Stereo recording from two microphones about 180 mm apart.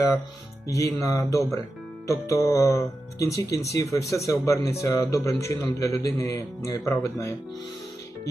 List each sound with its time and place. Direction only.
0.7 s a man's voice: 15° left (ahead or behind)